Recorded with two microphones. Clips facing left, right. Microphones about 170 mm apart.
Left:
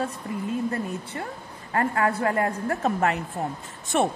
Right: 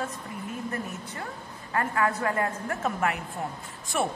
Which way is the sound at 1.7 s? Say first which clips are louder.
Left 3 dB; 30° left (ahead or behind).